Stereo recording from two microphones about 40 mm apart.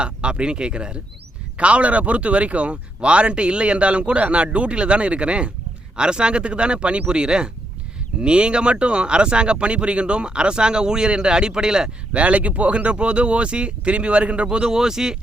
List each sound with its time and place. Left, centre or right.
0.0 s speech: right
12.1 s speech: right; by 15.2 s centre